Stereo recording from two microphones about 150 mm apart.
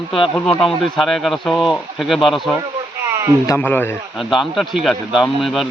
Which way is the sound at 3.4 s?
15° left (ahead or behind).